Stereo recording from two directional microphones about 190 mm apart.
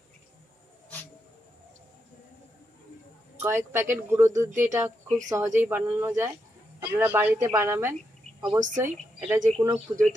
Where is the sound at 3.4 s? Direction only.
10° right (ahead or behind).